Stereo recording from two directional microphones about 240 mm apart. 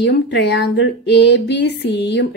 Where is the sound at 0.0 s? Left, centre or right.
Left.